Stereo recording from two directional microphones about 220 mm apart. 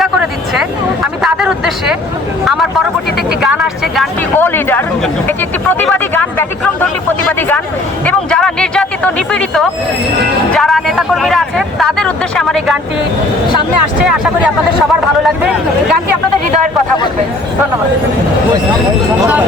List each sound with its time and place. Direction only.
0.0 s a sound: centre (ahead or behind)
3.4 s speech: centre (ahead or behind)
7.3 s speech: 10° left (ahead or behind)